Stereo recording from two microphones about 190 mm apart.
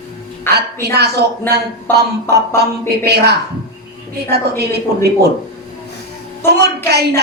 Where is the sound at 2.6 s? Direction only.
60° right (ahead or behind).